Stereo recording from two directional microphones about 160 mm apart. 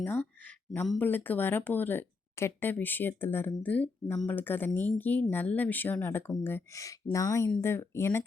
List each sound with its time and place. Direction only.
0.0 s speech: 15° left (ahead or behind)